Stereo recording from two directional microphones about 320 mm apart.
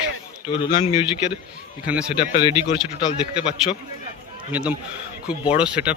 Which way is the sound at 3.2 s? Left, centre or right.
Centre.